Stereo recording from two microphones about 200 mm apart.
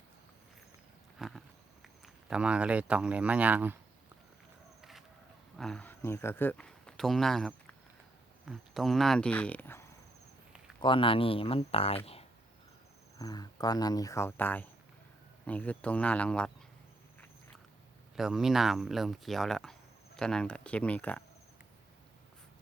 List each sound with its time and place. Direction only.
1.2 s a sound: centre (ahead or behind)
2.3 s speech: 5° right (ahead or behind)
4.8 s a sound: centre (ahead or behind)
5.5 s speech: 5° left (ahead or behind)
10.8 s speech: 25° left (ahead or behind)
13.1 s speech: 20° left (ahead or behind)
18.2 s speech: centre (ahead or behind)